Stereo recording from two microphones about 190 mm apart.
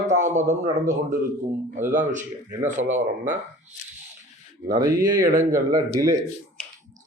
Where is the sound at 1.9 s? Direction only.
40° right (ahead or behind).